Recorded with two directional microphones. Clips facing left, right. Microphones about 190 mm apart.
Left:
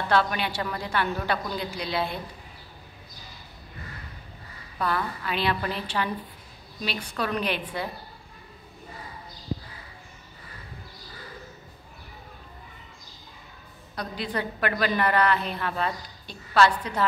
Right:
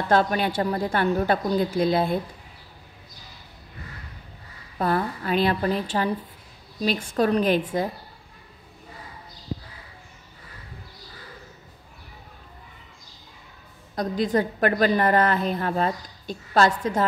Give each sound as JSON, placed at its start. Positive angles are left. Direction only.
{"t": 0.1, "sound": "a woman's voice", "side_deg": -45}
{"t": 4.7, "sound": "a woman's voice", "side_deg": -45}
{"t": 13.9, "sound": "a woman's voice", "side_deg": -45}